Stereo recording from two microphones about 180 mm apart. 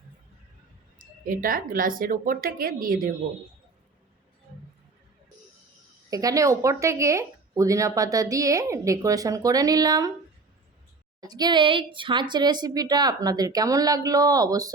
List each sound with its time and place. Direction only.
0.9 s speech: 50° right (ahead or behind)
6.1 s speech: 20° right (ahead or behind)
11.2 s speech: 20° right (ahead or behind)